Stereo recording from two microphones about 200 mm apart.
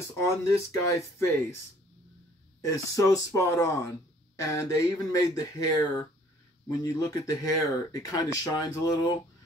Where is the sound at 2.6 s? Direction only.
15° left (ahead or behind).